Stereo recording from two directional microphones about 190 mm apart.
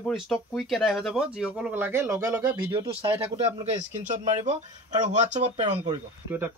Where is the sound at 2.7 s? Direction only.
25° right (ahead or behind).